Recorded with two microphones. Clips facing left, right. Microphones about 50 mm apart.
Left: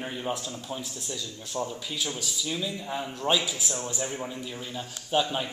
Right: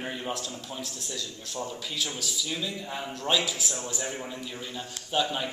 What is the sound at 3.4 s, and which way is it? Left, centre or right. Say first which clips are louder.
A man's voice: even; centre.